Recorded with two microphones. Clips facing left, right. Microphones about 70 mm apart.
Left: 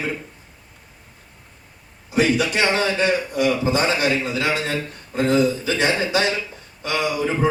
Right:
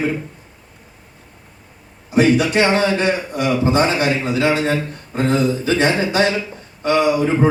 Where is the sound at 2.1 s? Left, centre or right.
Right.